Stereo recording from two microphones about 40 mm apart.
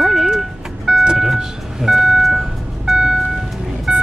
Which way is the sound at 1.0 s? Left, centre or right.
Centre.